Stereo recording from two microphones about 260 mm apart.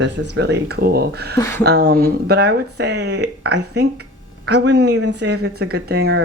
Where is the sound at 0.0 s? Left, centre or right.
Right.